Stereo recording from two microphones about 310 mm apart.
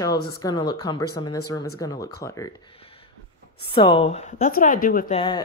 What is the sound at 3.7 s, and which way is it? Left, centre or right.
A woman's voice, centre.